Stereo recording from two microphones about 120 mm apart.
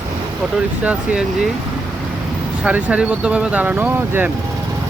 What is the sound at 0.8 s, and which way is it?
Speech, 10° right (ahead or behind).